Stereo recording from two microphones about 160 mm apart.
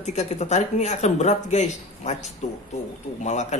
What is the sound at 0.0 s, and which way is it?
A man's voice, 45° left (ahead or behind).